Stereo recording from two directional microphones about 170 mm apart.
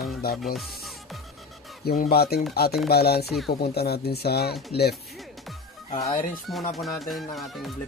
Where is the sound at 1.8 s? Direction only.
60° left (ahead or behind).